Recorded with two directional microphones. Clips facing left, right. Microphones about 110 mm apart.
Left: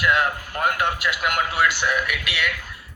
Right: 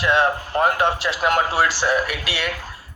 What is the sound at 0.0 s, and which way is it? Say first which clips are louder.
Speech: right 3 dB; 30° right (ahead or behind).